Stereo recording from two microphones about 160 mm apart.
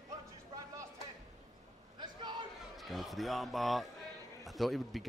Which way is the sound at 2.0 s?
30° right (ahead or behind).